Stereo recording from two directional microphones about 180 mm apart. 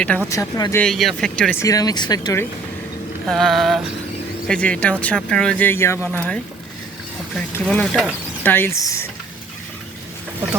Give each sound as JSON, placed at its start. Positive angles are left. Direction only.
{"t": 0.3, "sound": "speech", "side_deg": 20}
{"t": 0.8, "sound": "speech", "side_deg": 0}
{"t": 1.6, "sound": "speech", "side_deg": 20}
{"t": 3.2, "sound": "speech", "side_deg": 0}